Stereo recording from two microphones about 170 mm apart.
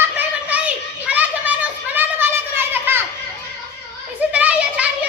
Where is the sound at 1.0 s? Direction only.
10° right (ahead or behind).